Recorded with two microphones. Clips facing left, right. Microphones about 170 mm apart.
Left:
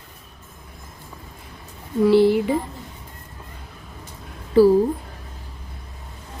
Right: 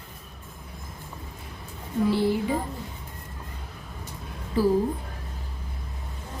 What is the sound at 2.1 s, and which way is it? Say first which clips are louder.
Speech: left 10 dB; 80° left.